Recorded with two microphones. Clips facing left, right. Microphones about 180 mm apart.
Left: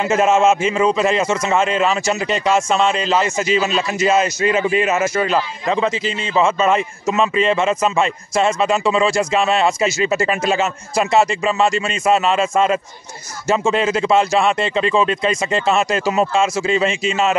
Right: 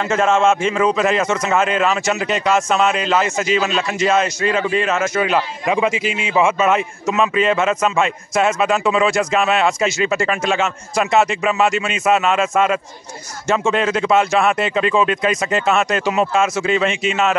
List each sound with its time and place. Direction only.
0.0 s a man's voice: 5° left (ahead or behind)
10.4 s a man's voice: 40° left (ahead or behind)
11.0 s a man's voice: centre (ahead or behind)